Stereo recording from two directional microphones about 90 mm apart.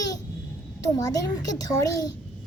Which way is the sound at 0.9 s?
40° left (ahead or behind).